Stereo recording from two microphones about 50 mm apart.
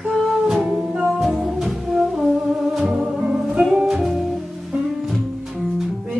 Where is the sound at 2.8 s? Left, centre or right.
Centre.